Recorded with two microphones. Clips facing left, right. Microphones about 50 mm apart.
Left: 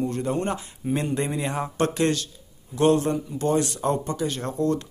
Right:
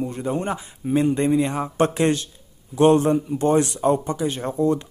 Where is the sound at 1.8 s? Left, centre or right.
Right.